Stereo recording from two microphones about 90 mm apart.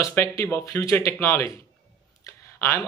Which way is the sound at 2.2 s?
30° left (ahead or behind).